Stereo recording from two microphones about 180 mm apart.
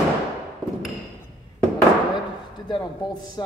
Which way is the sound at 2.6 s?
25° left (ahead or behind).